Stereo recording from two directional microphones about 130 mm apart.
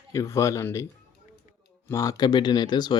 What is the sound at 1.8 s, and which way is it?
Speech, 25° left (ahead or behind).